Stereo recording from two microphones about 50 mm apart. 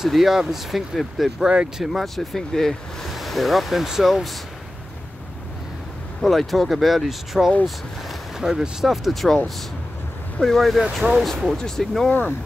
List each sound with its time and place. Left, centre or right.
0.0 s speech: centre
6.2 s speech: centre
10.4 s speech: centre
11.5 s speech: centre
12.1 s speech: left